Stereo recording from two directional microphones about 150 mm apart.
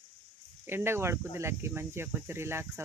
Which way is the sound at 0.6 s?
15° right (ahead or behind).